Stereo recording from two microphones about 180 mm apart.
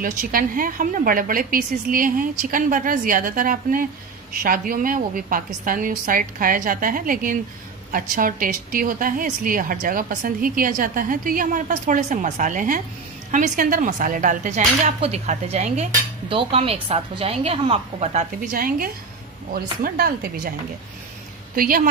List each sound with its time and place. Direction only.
0.0 s a woman's voice: 50° right (ahead or behind)
21.5 s a woman's voice: 50° right (ahead or behind)